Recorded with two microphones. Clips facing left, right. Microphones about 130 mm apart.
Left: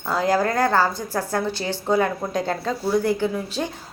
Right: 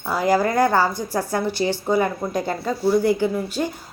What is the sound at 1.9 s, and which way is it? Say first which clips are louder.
Speech: left 3 dB; 5° right (ahead or behind).